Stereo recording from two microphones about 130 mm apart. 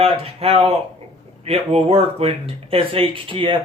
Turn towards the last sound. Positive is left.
turn(degrees=-40)  # may be behind; listen again after turning